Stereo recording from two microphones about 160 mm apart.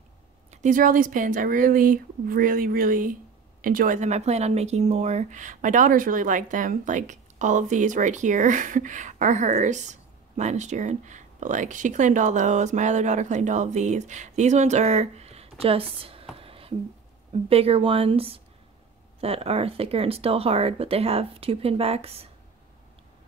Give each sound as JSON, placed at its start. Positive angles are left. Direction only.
{"t": 0.5, "sound": "speech", "side_deg": -50}
{"t": 16.3, "sound": "a sound", "side_deg": -35}
{"t": 17.3, "sound": "speech", "side_deg": -40}